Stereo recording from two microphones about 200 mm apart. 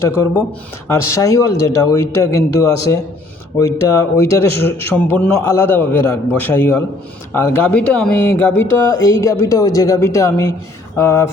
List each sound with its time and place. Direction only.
0.2 s a man's voice: 10° left (ahead or behind)